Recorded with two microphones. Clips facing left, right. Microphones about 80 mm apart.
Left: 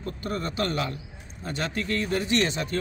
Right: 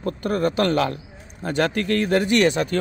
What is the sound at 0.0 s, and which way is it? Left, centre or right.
A man's voice, right.